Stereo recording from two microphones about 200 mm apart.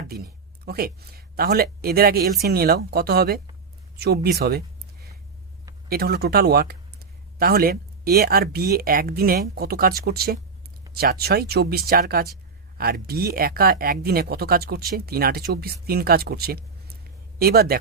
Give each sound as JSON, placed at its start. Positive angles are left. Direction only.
{"t": 0.6, "sound": "speech", "side_deg": -50}
{"t": 5.9, "sound": "speech", "side_deg": -50}